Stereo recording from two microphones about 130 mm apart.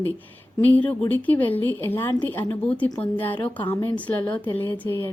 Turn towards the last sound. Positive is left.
turn(degrees=15)  # may be behind; listen again after turning